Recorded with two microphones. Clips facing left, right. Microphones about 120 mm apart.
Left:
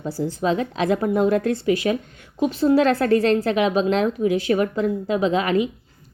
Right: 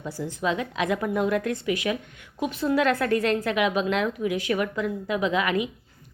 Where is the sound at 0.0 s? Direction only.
35° left (ahead or behind).